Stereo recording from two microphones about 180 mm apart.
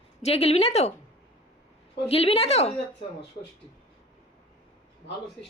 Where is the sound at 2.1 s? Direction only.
35° left (ahead or behind).